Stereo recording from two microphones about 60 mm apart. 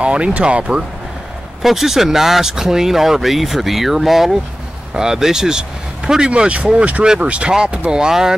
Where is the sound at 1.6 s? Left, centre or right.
Centre.